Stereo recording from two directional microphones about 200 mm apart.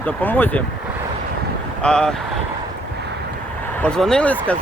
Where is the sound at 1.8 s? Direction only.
5° left (ahead or behind).